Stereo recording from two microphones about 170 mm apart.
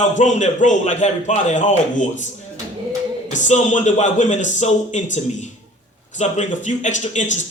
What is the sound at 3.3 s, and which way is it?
A man's voice, 45° left (ahead or behind).